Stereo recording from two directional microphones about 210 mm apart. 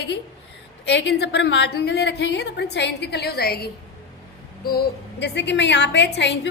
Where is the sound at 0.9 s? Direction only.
55° left (ahead or behind).